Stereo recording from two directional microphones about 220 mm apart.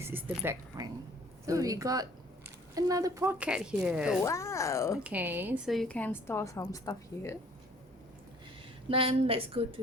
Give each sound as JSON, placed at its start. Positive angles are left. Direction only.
{"t": 0.0, "sound": "speech", "side_deg": -10}
{"t": 4.2, "sound": "a woman's voice", "side_deg": 15}
{"t": 4.9, "sound": "a woman's voice", "side_deg": -5}
{"t": 8.9, "sound": "a woman's voice", "side_deg": -25}